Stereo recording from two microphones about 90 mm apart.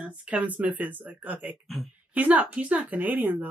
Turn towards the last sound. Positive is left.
turn(degrees=-20)  # may be behind; listen again after turning